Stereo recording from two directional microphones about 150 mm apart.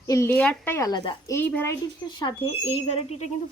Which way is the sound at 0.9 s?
30° left (ahead or behind).